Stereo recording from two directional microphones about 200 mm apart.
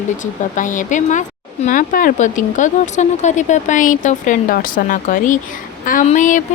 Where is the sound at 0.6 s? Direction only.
40° left (ahead or behind).